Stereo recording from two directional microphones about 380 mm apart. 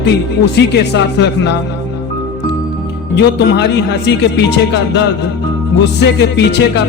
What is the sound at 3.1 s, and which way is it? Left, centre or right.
Music, left.